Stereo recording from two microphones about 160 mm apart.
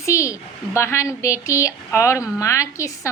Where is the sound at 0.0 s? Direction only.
20° left (ahead or behind).